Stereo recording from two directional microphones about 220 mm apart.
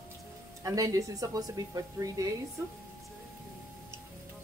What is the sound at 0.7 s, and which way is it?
Speech, 15° right (ahead or behind).